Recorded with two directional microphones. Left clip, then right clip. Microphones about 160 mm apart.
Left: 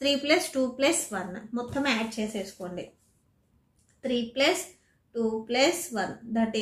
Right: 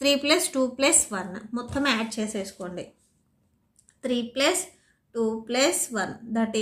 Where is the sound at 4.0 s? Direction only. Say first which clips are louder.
Right 1 dB; 30° right (ahead or behind).